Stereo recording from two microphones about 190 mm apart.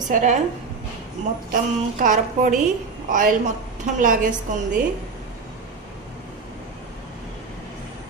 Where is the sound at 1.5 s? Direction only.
45° right (ahead or behind).